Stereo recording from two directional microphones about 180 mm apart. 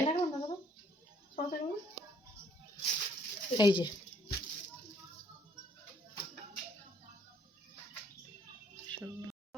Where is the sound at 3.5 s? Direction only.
25° left (ahead or behind).